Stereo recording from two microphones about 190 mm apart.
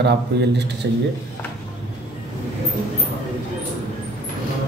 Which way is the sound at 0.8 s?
70° right (ahead or behind).